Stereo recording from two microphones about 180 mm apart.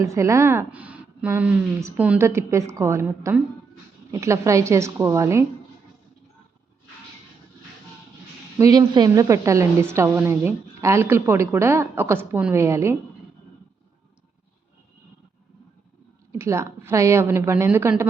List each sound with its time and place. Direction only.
0.0 s a woman's voice: 15° right (ahead or behind)
8.5 s a woman's voice: 15° right (ahead or behind)
16.4 s a woman's voice: 15° right (ahead or behind)